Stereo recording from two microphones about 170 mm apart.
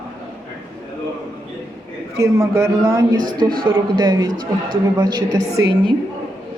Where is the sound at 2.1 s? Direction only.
15° right (ahead or behind).